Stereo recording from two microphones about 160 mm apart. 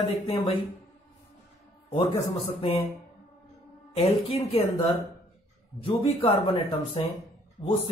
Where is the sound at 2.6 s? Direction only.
40° left (ahead or behind).